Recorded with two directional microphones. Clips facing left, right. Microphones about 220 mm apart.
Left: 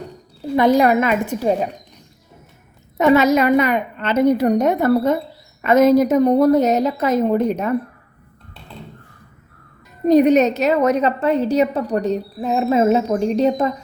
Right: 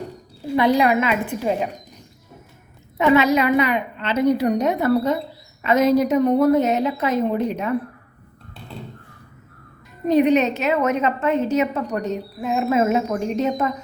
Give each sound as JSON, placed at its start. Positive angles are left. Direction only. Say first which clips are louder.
{"t": 0.5, "sound": "a woman's voice", "louder": "left 3 dB", "side_deg": 45}
{"t": 3.0, "sound": "a woman's voice", "louder": "left 3 dB", "side_deg": 40}
{"t": 10.1, "sound": "a woman's voice", "louder": "left 4 dB", "side_deg": 40}